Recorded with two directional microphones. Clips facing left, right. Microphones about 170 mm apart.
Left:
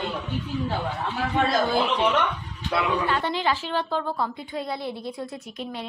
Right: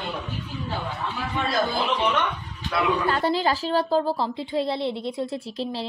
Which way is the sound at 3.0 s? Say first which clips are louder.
Right 2 dB; 40° right (ahead or behind).